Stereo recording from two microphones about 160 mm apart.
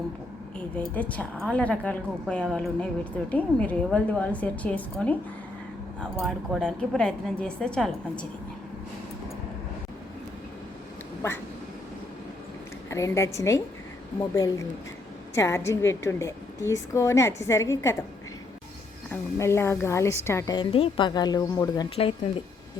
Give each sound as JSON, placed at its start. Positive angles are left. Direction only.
{"t": 0.9, "sound": "a woman's voice", "side_deg": 10}
{"t": 12.9, "sound": "a woman's voice", "side_deg": 15}
{"t": 19.4, "sound": "a woman's voice", "side_deg": 15}
{"t": 20.6, "sound": "speech", "side_deg": 35}